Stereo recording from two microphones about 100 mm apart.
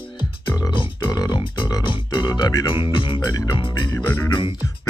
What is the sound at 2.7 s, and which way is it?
Music, 60° left (ahead or behind).